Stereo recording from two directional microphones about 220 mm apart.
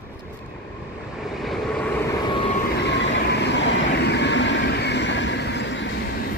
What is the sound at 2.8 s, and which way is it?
Train, 55° left (ahead or behind).